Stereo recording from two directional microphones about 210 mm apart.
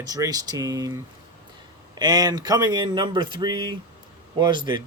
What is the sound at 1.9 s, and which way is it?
A man's voice, 20° right (ahead or behind).